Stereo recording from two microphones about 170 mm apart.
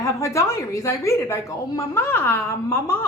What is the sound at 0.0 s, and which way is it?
A woman's voice, 15° left (ahead or behind).